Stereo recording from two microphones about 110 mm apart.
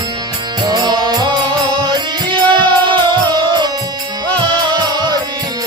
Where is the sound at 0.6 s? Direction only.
40° right (ahead or behind).